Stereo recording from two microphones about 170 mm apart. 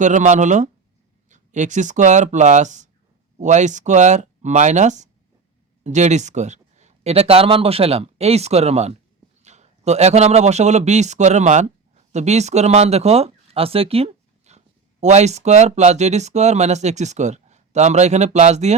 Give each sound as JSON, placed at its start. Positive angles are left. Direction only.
{"t": 0.0, "sound": "a man's voice", "side_deg": -45}